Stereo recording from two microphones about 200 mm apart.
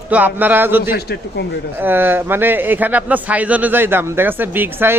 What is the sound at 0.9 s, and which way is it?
Speech, 55° left (ahead or behind).